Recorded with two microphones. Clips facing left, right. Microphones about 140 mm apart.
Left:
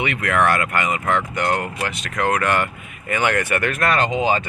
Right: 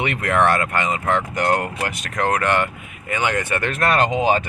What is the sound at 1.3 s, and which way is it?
Speech, 40° right (ahead or behind).